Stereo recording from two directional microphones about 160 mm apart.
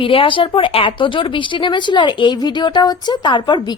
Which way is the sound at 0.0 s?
35° left (ahead or behind).